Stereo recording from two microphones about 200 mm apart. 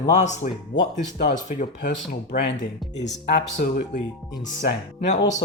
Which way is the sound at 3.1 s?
60° left (ahead or behind).